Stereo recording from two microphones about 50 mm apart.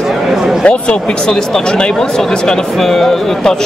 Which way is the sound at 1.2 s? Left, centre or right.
Centre.